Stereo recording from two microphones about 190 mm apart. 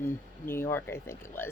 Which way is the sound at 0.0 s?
10° left (ahead or behind).